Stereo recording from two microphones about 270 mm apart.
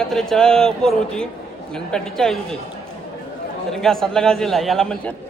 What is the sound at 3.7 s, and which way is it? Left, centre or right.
A man's voice, centre.